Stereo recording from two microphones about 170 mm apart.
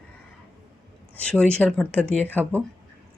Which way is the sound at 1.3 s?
5° left (ahead or behind).